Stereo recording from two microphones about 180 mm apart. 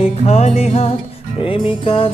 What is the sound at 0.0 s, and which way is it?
Music, 35° left (ahead or behind).